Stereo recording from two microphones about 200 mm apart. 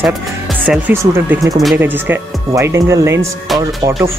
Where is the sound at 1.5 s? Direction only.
Centre (ahead or behind).